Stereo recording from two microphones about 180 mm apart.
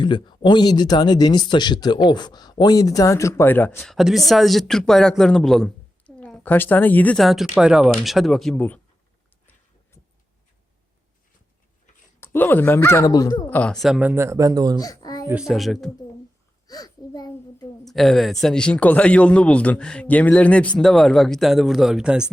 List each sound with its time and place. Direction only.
0.0 s speech: 25° left (ahead or behind); by 8.8 s 10° left (ahead or behind)
12.2 s speech: 10° left (ahead or behind)
13.5 s speech: 5° left (ahead or behind); by 14.8 s 20° right (ahead or behind)
14.8 s a sound: 20° left (ahead or behind)
15.3 s speech: 5° right (ahead or behind)
16.6 s a sound: 20° left (ahead or behind)
17.8 s speech: centre (ahead or behind)